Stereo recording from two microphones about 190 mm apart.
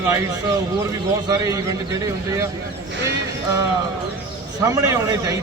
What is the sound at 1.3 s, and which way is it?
Speech, 20° right (ahead or behind).